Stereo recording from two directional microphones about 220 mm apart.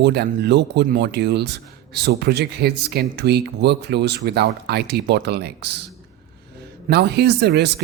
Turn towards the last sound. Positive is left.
turn(degrees=-50)  # may be behind; listen again after turning